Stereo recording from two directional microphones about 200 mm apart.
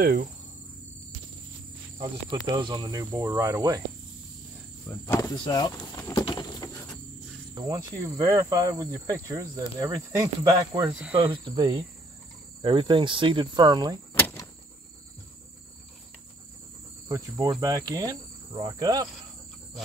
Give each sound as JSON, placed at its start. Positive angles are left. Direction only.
{"t": 0.0, "sound": "cricket", "side_deg": -50}
{"t": 2.5, "sound": "cricket", "side_deg": -20}
{"t": 4.8, "sound": "speech", "side_deg": 15}
{"t": 7.5, "sound": "cricket", "side_deg": -15}
{"t": 10.9, "sound": "cricket", "side_deg": -5}
{"t": 11.1, "sound": "insect", "side_deg": -25}
{"t": 14.1, "sound": "vehicle", "side_deg": 15}
{"t": 17.1, "sound": "insect", "side_deg": -15}